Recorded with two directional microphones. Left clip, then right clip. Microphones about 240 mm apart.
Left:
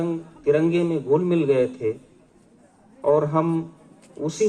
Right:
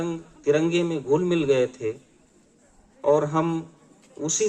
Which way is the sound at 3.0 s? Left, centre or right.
Right.